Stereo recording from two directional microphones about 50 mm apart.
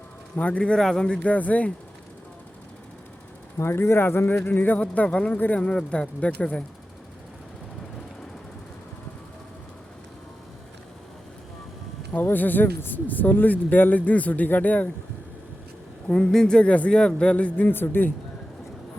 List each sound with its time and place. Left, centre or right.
0.3 s a man's voice: left
0.8 s speech: centre
1.3 s speech: left
3.6 s speech: left
4.4 s speech: left
4.8 s a man's voice: left
5.4 s speech: left
5.9 s a man's voice: left
12.1 s speech: left
16.0 s a man's voice: centre
17.7 s speech: left